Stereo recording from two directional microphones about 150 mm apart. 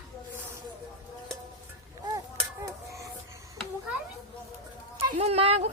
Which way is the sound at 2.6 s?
20° right (ahead or behind).